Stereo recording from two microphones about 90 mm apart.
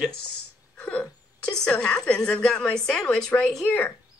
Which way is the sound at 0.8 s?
10° left (ahead or behind).